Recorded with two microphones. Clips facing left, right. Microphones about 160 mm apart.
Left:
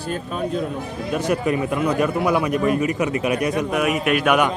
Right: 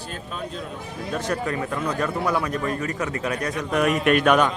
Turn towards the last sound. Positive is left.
turn(degrees=10)  # may be behind; listen again after turning